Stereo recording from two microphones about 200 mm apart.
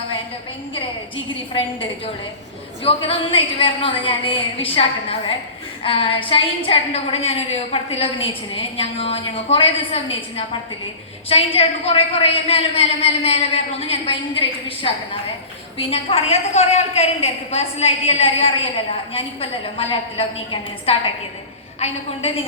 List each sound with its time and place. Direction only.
0.7 s a woman's voice: 25° left (ahead or behind)
22.2 s a woman's voice: 30° left (ahead or behind)